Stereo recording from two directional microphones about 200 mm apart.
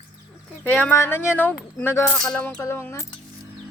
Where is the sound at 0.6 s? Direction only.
10° left (ahead or behind).